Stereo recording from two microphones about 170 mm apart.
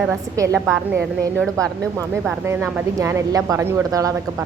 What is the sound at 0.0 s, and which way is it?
Speech, 15° right (ahead or behind).